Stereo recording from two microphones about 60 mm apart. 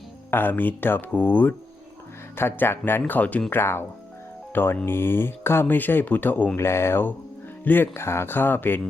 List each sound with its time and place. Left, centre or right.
0.3 s speech: left
3.5 s speech: left
6.6 s mantra: left
7.6 s speech: left